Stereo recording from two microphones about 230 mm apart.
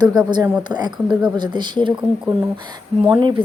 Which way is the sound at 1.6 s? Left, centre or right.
Centre.